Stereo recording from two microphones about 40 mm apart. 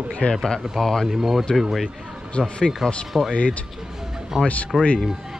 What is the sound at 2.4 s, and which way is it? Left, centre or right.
Speech, centre.